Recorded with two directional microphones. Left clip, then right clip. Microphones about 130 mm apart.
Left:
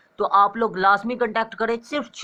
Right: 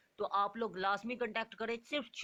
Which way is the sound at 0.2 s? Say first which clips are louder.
Left 17 dB; 30° right (ahead or behind).